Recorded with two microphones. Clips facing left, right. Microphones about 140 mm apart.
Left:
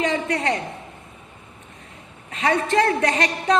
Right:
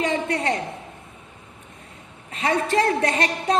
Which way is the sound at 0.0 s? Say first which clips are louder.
Left 1 dB; 30° right (ahead or behind).